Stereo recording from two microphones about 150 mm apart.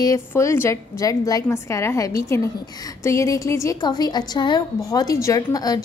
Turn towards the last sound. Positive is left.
turn(degrees=25)  # may be behind; listen again after turning